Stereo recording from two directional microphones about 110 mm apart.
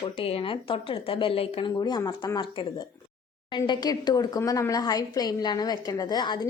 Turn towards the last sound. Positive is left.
turn(degrees=45)  # may be behind; listen again after turning